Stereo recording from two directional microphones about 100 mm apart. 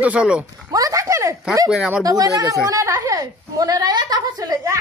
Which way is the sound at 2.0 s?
40° right (ahead or behind).